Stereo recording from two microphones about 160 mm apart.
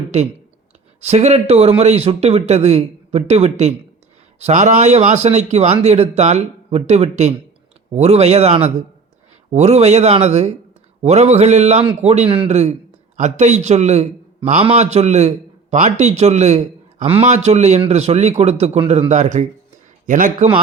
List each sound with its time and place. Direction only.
1.0 s a man's voice: 45° right (ahead or behind)
13.1 s a man's voice: 50° right (ahead or behind)